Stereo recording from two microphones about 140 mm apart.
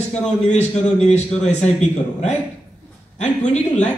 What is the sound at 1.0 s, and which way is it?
Speech, 50° left (ahead or behind).